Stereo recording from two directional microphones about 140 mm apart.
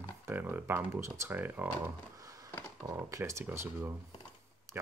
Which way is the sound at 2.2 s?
25° right (ahead or behind).